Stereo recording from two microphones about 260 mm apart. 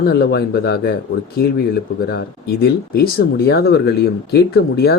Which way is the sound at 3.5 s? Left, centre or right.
Left.